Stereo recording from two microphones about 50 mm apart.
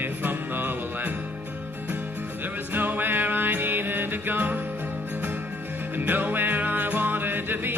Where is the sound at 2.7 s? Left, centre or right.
Right.